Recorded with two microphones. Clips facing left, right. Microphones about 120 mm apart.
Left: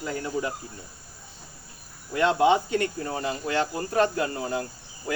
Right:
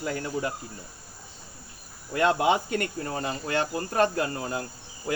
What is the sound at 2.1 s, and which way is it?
Speech, 50° right (ahead or behind).